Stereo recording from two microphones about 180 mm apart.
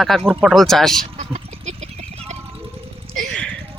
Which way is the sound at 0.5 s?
Centre (ahead or behind).